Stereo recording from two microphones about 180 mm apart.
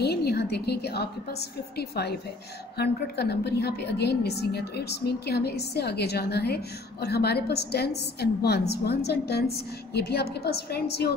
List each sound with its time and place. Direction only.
0.0 s a woman's voice: 65° left (ahead or behind)